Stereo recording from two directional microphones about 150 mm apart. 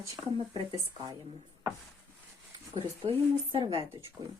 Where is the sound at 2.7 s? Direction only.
35° right (ahead or behind).